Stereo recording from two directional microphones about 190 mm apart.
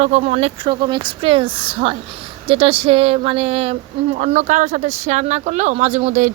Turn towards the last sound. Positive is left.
turn(degrees=-40)  # may be behind; listen again after turning